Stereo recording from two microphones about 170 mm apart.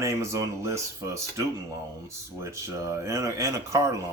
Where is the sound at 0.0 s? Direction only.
15° right (ahead or behind).